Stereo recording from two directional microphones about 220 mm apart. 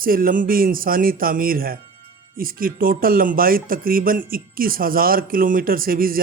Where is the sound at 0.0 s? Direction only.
40° right (ahead or behind).